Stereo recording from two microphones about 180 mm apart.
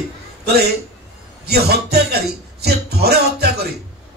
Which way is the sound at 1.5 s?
60° right (ahead or behind).